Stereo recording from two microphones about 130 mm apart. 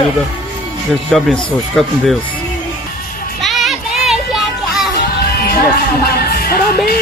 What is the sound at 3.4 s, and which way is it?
Children playing, centre (ahead or behind).